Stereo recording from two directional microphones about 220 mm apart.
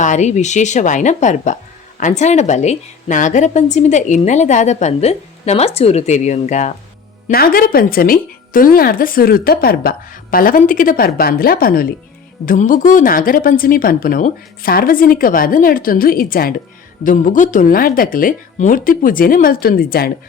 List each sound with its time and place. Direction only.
0.0 s a woman's voice: 35° left (ahead or behind)